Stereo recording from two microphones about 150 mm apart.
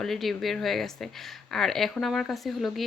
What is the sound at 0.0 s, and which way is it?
Speech, centre (ahead or behind).